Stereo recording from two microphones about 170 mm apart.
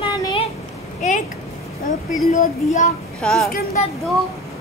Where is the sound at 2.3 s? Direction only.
45° left (ahead or behind).